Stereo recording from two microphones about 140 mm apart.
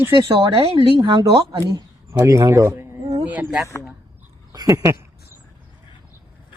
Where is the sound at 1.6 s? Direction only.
20° right (ahead or behind).